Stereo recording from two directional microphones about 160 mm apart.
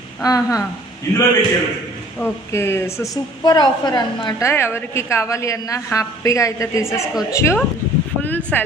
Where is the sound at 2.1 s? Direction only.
15° left (ahead or behind).